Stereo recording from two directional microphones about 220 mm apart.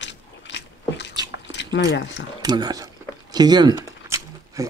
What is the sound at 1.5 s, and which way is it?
Speech, 50° left (ahead or behind).